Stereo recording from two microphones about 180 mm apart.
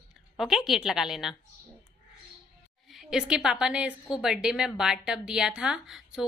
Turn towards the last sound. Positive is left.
turn(degrees=-5)  # may be behind; listen again after turning